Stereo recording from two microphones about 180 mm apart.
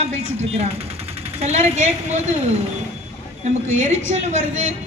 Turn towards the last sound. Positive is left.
turn(degrees=-40)  # may be behind; listen again after turning